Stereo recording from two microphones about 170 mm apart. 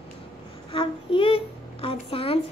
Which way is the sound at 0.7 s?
30° left (ahead or behind).